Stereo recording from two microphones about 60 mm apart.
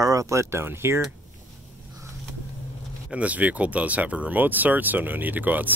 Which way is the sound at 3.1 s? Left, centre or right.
Right.